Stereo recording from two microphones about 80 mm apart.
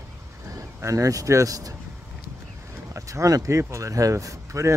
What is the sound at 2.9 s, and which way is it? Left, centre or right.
Speech, right.